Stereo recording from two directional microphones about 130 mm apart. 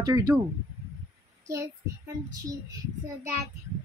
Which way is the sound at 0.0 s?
30° right (ahead or behind).